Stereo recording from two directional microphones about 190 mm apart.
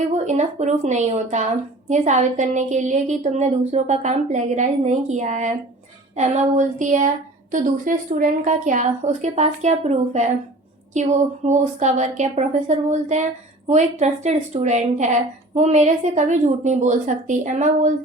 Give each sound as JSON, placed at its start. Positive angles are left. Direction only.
{"t": 0.1, "sound": "a woman's voice", "side_deg": -35}